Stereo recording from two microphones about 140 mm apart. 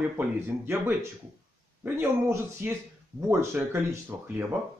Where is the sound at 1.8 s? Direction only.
15° right (ahead or behind).